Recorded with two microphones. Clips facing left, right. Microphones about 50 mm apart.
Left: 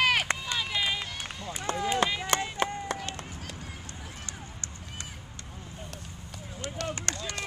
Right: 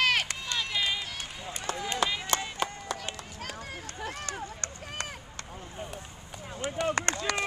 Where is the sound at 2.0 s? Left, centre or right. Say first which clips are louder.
Left 1 dB; centre.